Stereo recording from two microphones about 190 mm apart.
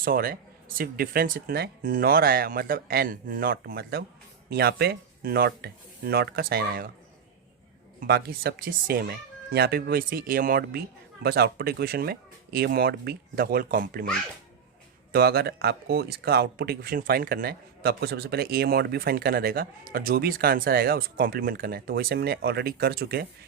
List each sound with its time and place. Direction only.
0.0 s speech: 50° right (ahead or behind)
8.0 s speech: 55° right (ahead or behind)
15.1 s speech: 55° right (ahead or behind)